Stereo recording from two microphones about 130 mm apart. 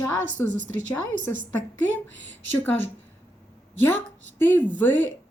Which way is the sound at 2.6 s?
15° left (ahead or behind).